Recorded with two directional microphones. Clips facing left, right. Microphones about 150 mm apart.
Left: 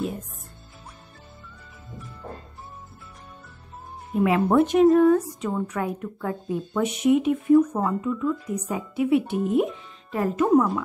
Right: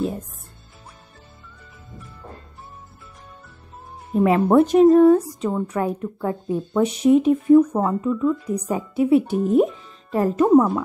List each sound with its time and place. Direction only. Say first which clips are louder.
4.1 s a woman's voice: right 4 dB; 35° right (ahead or behind)